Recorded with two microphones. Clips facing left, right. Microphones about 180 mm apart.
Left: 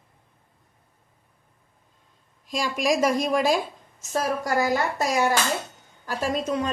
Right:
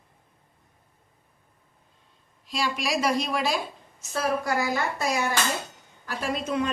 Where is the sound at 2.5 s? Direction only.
45° left (ahead or behind).